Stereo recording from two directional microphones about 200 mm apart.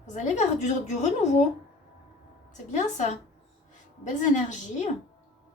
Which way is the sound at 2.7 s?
35° left (ahead or behind).